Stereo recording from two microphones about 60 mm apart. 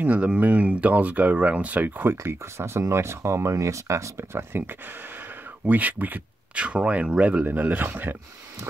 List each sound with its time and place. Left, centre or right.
0.0 s speech: right
4.2 s speech: right
5.7 s speech: right
7.4 s speech: right